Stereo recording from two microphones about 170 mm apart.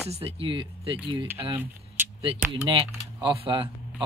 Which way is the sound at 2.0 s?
10° right (ahead or behind).